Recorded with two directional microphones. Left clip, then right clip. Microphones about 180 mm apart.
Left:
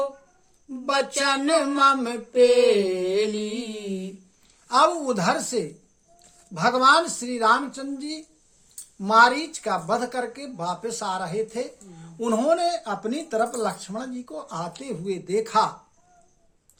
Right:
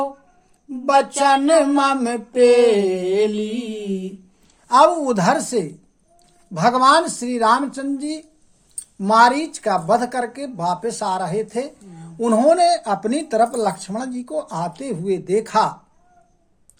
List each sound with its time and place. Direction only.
0.9 s speech: 25° right (ahead or behind)
3.8 s a sound: 50° left (ahead or behind)
4.7 s speech: 20° right (ahead or behind)